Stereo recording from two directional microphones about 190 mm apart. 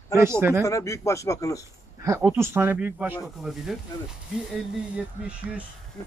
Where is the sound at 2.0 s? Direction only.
15° right (ahead or behind).